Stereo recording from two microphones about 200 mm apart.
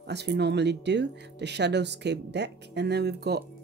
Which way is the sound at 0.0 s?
55° right (ahead or behind).